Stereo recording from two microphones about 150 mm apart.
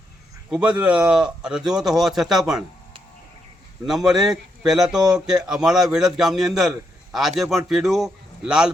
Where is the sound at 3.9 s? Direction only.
Centre (ahead or behind).